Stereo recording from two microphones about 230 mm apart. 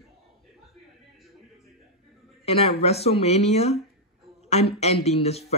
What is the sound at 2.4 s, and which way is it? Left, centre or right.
Speech, left.